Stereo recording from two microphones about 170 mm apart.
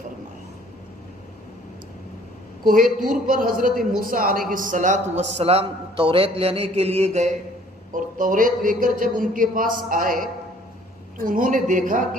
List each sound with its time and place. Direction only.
2.6 s a man's voice: 55° right (ahead or behind)
5.4 s a man's voice: 35° right (ahead or behind)
7.9 s a man's voice: 50° right (ahead or behind)
11.3 s a man's voice: 55° right (ahead or behind)